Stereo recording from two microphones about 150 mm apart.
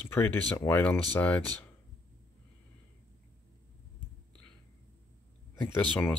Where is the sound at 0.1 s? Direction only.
15° left (ahead or behind).